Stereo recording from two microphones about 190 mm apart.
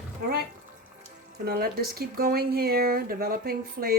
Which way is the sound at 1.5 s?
55° right (ahead or behind).